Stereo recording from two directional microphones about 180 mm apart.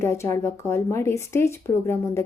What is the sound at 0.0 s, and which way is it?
Speech, 15° left (ahead or behind).